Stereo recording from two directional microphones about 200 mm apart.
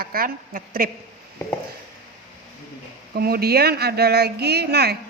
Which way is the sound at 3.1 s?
50° right (ahead or behind).